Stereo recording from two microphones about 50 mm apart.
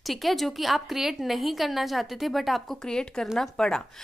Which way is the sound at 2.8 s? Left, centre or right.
Centre.